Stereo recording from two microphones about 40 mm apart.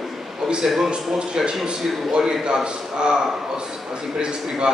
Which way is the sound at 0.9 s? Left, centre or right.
Centre.